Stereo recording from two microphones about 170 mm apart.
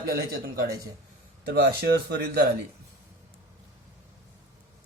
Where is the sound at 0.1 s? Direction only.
65° right (ahead or behind).